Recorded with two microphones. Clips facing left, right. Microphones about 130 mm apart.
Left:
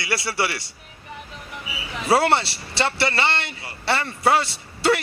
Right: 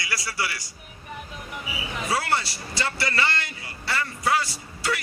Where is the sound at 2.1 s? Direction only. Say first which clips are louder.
Left 8 dB; 65° left (ahead or behind).